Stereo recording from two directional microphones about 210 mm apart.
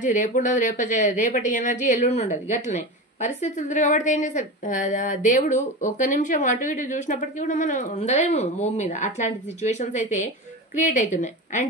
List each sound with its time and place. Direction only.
0.0 s a woman's voice: 35° left (ahead or behind)